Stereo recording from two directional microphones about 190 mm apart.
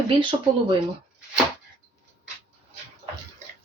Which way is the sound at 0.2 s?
25° right (ahead or behind).